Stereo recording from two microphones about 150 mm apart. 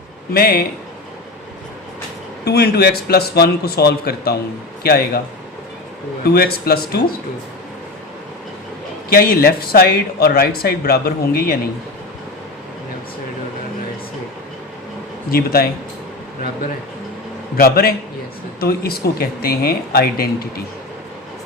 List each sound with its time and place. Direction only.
0.3 s speech: 80° left
2.4 s speech: 90° left
6.2 s speech: 90° left
9.0 s speech: 80° left
15.3 s speech: 90° left
17.6 s speech: 80° left
18.6 s speech: 90° left